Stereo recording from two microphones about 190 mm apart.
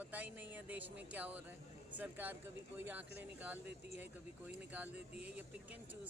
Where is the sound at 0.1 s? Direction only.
10° right (ahead or behind).